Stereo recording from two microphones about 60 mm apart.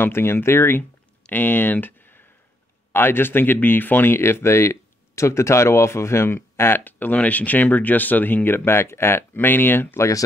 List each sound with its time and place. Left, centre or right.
0.0 s speech: left
9.9 s speech: left